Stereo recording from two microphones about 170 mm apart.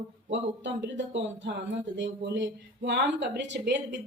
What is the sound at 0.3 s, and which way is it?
Speech, 90° right.